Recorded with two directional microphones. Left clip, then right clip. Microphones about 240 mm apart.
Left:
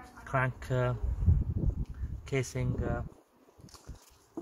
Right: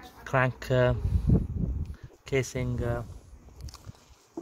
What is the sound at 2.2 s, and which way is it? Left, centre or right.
Speech, right.